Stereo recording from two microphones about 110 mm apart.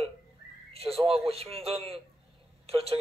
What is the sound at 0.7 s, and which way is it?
A man's voice, 65° right (ahead or behind).